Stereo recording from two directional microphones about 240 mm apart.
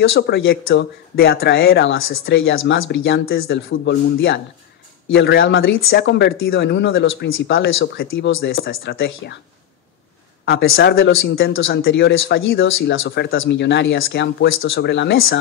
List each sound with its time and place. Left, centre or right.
0.0 s speech: left
10.4 s speech: left
11.8 s speech: left